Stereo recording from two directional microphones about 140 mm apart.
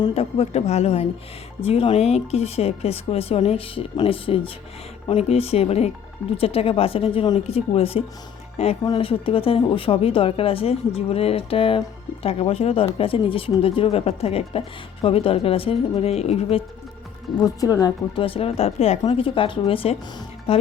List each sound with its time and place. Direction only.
0.1 s speech: 50° left (ahead or behind)
17.3 s speech: 25° left (ahead or behind)
18.2 s speech: 40° left (ahead or behind)